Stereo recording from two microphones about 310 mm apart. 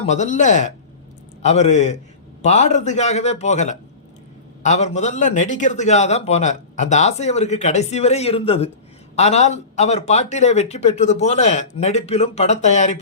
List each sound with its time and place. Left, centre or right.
0.0 s a man's voice: left